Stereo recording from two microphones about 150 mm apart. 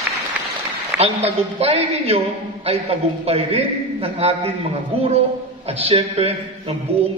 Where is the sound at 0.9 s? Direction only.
45° right (ahead or behind).